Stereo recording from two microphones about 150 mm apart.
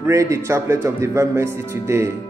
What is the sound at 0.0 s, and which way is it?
Speech, 20° right (ahead or behind).